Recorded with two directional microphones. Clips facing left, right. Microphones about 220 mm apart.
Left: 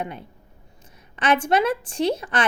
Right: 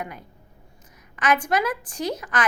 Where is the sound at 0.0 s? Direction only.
25° left (ahead or behind).